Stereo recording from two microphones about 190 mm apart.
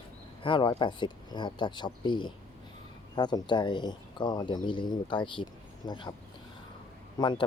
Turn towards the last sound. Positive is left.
turn(degrees=25)  # may be behind; listen again after turning